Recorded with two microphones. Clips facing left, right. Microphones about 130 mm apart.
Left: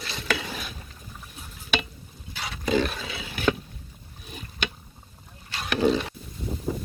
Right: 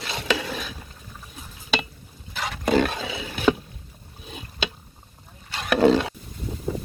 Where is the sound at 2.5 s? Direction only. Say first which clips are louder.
Right 3 dB; 60° right (ahead or behind).